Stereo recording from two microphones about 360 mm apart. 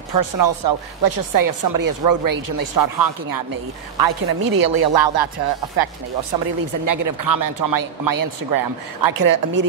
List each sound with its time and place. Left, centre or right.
0.1 s speech: right
6.4 s speech: right